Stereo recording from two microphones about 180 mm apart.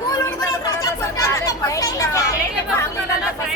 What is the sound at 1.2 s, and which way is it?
Chatter, 15° left (ahead or behind).